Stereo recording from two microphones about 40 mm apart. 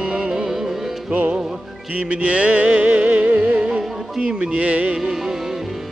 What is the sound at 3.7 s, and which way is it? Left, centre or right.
Music, right.